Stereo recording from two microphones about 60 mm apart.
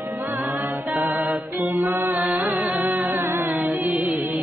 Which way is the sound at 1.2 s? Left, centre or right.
Right.